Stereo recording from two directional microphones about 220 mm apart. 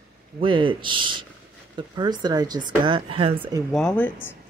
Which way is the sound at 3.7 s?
5° left (ahead or behind).